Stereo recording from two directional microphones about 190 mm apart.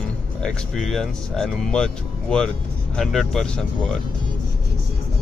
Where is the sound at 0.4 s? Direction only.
5° left (ahead or behind).